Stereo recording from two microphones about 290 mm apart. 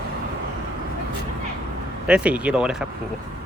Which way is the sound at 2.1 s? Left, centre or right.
Centre.